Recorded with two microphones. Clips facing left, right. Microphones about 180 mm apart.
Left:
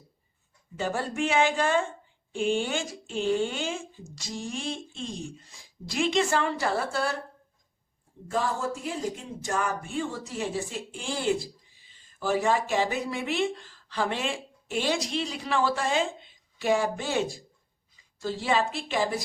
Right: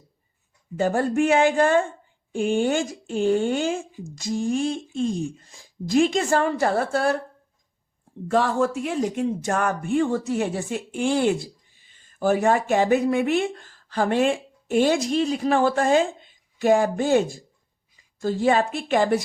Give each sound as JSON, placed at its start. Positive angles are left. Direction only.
{"t": 0.8, "sound": "a woman's voice", "side_deg": -45}
{"t": 8.3, "sound": "a woman's voice", "side_deg": -75}